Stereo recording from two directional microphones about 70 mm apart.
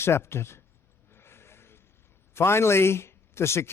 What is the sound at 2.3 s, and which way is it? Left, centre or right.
Speech, left.